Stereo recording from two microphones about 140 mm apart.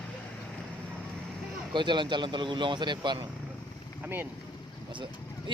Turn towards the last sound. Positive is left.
turn(degrees=-35)  # may be behind; listen again after turning